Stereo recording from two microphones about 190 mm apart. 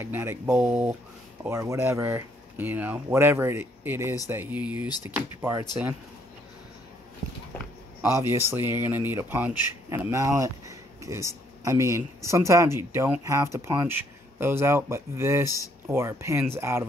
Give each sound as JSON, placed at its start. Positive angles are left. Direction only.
{"t": 0.0, "sound": "speech", "side_deg": -10}
{"t": 4.8, "sound": "speech", "side_deg": 20}
{"t": 5.1, "sound": "speech", "side_deg": -10}
{"t": 8.0, "sound": "speech", "side_deg": -15}